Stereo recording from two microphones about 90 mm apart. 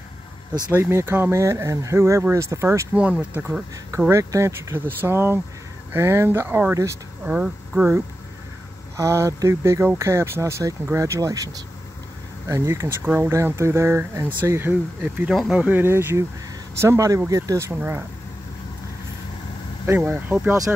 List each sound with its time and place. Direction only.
0.7 s speech: 25° right (ahead or behind)
2.9 s speech: 15° right (ahead or behind)
4.1 s speech: 35° right (ahead or behind)
7.2 s speech: 10° right (ahead or behind)
8.9 s speech: 35° right (ahead or behind)
13.0 s speech: 15° right (ahead or behind)
13.3 s speech: 30° right (ahead or behind)
20.1 s speech: 20° right (ahead or behind)